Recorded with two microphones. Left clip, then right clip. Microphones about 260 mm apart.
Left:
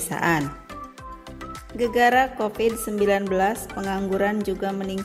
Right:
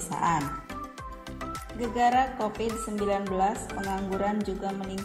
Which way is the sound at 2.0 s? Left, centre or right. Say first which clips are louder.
Left 5 dB; left.